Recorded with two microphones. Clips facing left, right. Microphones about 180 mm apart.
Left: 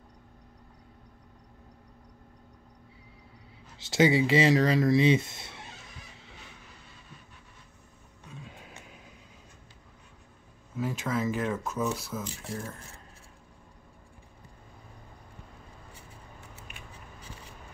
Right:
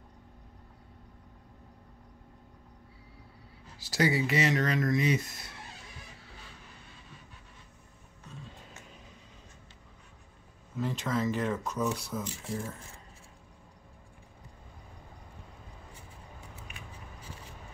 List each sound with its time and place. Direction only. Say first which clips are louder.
3.7 s speech: left 5 dB; 25° left (ahead or behind)
8.3 s music: left 1 dB; 10° left (ahead or behind)
10.8 s speech: left 1 dB; 5° left (ahead or behind)